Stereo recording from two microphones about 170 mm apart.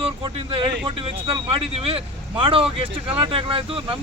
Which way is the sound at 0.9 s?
30° right (ahead or behind).